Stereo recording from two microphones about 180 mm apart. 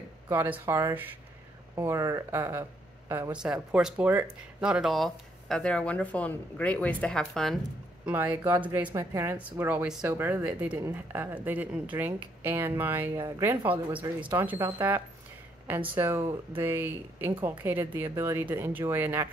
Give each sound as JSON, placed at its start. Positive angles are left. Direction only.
{"t": 0.3, "sound": "speech", "side_deg": -15}
{"t": 8.0, "sound": "speech", "side_deg": -10}